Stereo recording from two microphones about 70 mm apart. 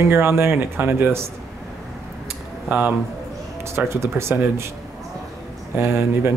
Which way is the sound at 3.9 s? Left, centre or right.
Right.